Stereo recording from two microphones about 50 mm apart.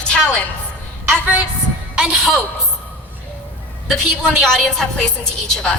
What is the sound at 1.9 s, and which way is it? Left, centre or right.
Speech, centre.